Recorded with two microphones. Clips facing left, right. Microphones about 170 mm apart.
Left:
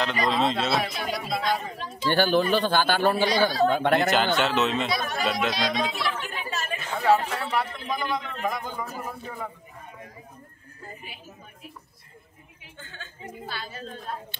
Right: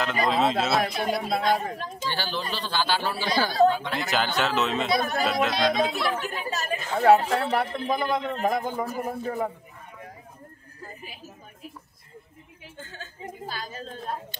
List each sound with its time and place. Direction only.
0.3 s speech: 5° right (ahead or behind)
0.9 s a man's voice: 50° right (ahead or behind)
2.0 s a man's voice: 50° left (ahead or behind)
4.4 s speech: centre (ahead or behind)
4.9 s speech: 40° right (ahead or behind)
5.2 s speech: centre (ahead or behind)
5.5 s a man's voice: 55° right (ahead or behind)
10.8 s neigh: 40° right (ahead or behind)
12.7 s a woman's voice: 40° right (ahead or behind)